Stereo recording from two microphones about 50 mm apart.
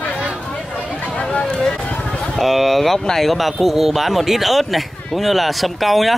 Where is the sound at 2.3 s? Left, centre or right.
Centre.